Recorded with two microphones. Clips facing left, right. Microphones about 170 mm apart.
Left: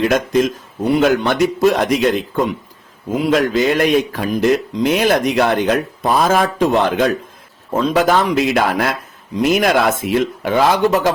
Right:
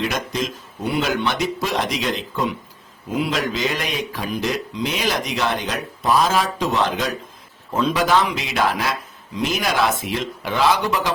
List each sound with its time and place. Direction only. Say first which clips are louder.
0.0 s speech: left 9 dB; 55° left (ahead or behind)